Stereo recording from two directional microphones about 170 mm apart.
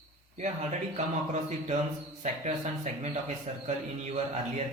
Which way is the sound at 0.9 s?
40° right (ahead or behind).